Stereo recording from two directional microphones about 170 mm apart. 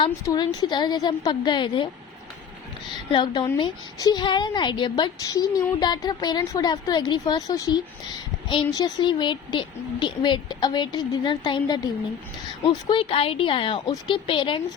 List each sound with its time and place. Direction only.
0.0 s a woman's voice: 25° left (ahead or behind)
3.1 s a woman's voice: 25° left (ahead or behind)